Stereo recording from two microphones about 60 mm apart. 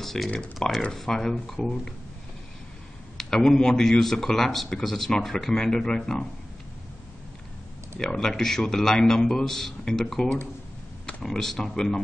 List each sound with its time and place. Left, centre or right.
0.0 s typing: centre
0.6 s a man's voice: centre
3.2 s a man's voice: centre
8.0 s a man's voice: centre